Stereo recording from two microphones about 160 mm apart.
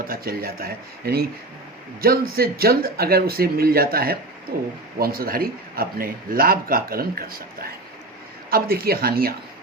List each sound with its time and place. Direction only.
0.0 s a man's voice: 65° right (ahead or behind)
8.4 s a man's voice: 70° right (ahead or behind)